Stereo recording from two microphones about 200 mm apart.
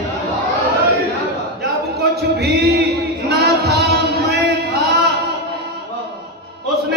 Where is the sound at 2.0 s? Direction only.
50° right (ahead or behind).